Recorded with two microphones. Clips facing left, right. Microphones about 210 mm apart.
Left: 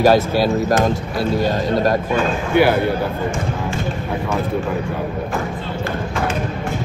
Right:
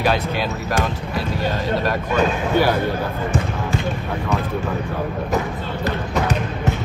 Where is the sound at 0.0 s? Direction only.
40° left (ahead or behind).